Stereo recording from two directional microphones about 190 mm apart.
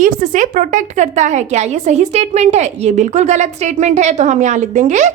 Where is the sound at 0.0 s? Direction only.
45° right (ahead or behind).